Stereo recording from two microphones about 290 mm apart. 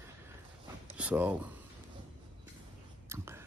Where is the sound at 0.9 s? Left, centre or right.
Centre.